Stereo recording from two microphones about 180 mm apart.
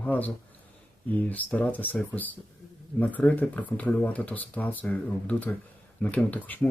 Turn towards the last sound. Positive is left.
turn(degrees=10)  # may be behind; listen again after turning